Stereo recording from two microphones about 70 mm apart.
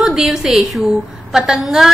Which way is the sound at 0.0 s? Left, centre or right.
Centre.